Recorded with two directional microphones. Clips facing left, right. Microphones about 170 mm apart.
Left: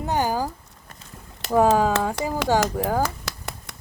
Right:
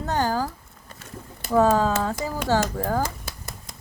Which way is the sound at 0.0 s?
15° left (ahead or behind).